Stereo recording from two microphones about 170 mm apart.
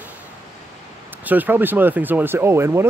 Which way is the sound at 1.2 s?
10° right (ahead or behind).